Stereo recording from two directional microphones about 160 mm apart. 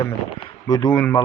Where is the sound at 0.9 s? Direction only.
10° left (ahead or behind).